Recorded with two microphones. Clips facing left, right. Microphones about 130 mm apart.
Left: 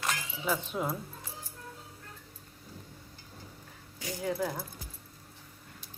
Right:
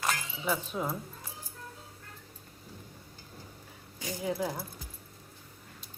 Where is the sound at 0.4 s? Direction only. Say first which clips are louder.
Even; centre (ahead or behind).